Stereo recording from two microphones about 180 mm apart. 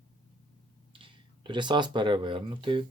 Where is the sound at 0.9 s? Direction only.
30° right (ahead or behind).